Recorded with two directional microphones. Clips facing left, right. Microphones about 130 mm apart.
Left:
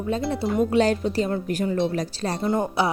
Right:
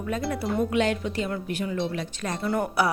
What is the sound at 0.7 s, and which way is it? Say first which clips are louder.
A woman's voice: left 4 dB; 35° left (ahead or behind).